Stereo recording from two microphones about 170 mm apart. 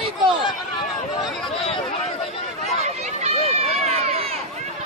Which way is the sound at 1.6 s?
35° left (ahead or behind).